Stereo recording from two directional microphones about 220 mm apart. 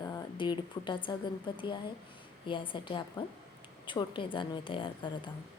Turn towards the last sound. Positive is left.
turn(degrees=20)  # may be behind; listen again after turning